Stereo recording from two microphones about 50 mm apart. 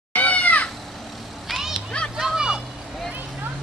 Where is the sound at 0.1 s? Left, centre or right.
Left.